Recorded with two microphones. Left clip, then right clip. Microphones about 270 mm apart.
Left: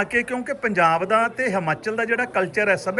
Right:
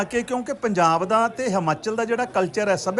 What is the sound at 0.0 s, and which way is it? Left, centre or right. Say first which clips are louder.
Speech: left 2 dB; right.